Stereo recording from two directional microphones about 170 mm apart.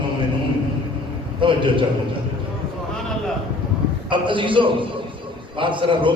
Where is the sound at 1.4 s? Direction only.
30° right (ahead or behind).